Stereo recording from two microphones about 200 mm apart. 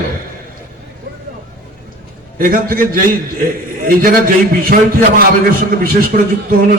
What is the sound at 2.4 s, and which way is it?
A man's voice, 45° right (ahead or behind).